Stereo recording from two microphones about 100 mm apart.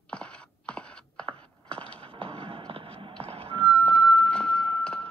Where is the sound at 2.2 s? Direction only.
70° right (ahead or behind).